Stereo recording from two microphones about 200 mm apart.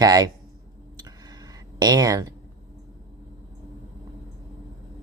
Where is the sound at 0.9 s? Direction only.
20° right (ahead or behind).